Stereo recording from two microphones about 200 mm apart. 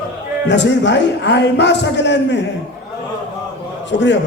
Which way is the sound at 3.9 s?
65° left (ahead or behind).